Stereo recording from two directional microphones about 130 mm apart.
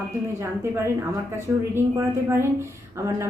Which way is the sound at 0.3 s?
20° right (ahead or behind).